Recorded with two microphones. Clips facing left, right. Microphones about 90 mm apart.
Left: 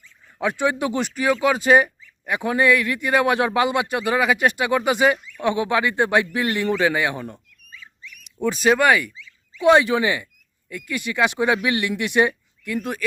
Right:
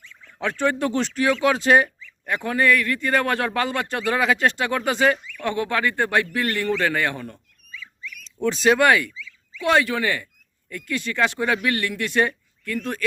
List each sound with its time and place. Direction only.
0.0 s a sound: 90° right
0.3 s a man's voice: 10° left (ahead or behind)
9.6 s a man's voice: 20° left (ahead or behind)